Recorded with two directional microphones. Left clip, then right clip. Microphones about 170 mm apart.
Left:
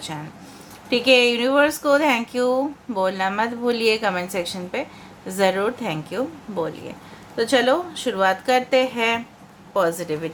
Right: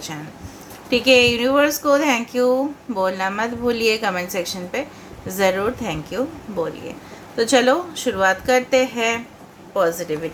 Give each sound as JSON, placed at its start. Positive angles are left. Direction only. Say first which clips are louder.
{"t": 0.9, "sound": "speech", "louder": "right 2 dB", "side_deg": 20}